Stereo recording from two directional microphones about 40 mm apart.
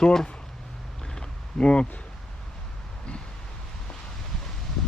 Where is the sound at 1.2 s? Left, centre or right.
Left.